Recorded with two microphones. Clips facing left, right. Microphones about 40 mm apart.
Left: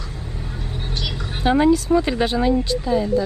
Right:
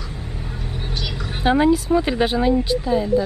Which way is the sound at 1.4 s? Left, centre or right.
Centre.